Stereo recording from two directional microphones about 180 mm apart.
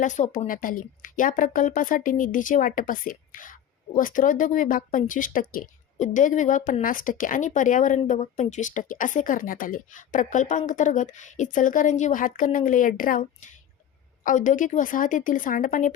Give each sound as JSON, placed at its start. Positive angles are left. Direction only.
{"t": 0.0, "sound": "speech", "side_deg": 45}